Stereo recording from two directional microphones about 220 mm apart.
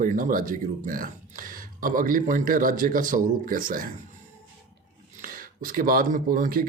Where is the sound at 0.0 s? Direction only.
40° right (ahead or behind).